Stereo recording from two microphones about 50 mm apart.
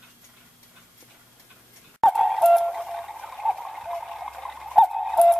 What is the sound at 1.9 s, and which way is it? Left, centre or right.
Clock, centre.